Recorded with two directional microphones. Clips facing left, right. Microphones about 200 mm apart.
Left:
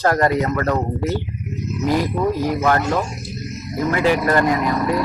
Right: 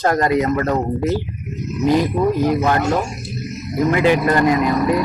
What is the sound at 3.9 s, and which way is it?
Speech, 20° right (ahead or behind).